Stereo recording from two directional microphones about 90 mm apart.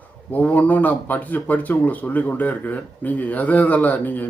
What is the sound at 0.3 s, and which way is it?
A man's voice, 20° left (ahead or behind).